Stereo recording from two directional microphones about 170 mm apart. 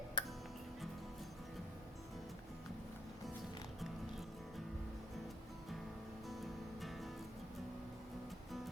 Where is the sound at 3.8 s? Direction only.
Centre (ahead or behind).